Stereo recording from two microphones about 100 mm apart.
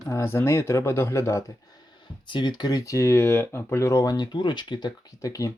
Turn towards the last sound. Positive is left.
turn(degrees=35)  # may be behind; listen again after turning